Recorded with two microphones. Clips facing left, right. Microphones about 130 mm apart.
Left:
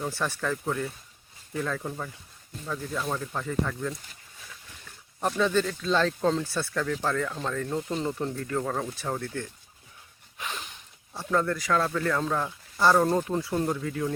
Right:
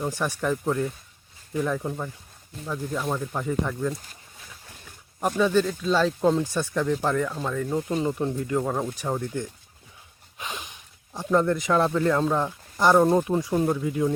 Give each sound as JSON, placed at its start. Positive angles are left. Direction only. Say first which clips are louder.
{"t": 0.0, "sound": "speech", "louder": "right 3 dB", "side_deg": -15}
{"t": 5.4, "sound": "speech", "louder": "right 4 dB", "side_deg": -10}
{"t": 10.3, "sound": "a sound", "louder": "right 1 dB", "side_deg": -15}
{"t": 11.1, "sound": "speech", "louder": "right 5 dB", "side_deg": -15}